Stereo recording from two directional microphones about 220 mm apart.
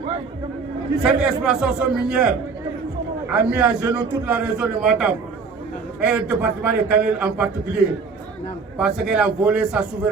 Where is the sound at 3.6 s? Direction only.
5° right (ahead or behind).